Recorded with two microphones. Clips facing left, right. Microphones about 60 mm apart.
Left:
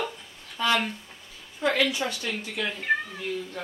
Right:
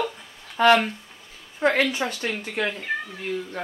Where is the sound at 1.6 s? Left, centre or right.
Right.